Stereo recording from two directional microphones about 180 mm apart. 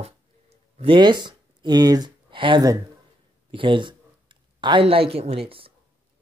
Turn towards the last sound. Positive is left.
turn(degrees=-30)  # may be behind; listen again after turning